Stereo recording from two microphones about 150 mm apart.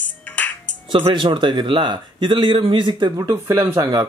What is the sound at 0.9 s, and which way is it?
Speech, 30° right (ahead or behind).